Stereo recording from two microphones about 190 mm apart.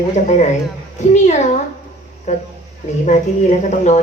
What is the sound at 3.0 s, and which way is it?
Speech, 40° left (ahead or behind).